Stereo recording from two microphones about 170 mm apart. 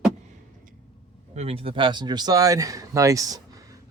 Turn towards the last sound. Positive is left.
turn(degrees=-20)  # may be behind; listen again after turning